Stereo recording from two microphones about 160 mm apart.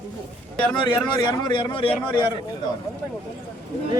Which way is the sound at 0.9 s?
25° left (ahead or behind).